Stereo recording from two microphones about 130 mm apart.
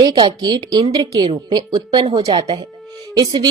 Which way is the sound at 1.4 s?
35° right (ahead or behind).